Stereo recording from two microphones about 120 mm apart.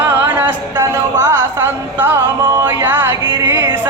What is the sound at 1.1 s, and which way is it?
Music, 25° right (ahead or behind).